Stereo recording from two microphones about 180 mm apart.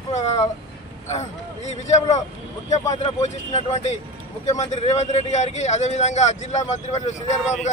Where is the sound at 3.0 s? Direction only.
35° left (ahead or behind).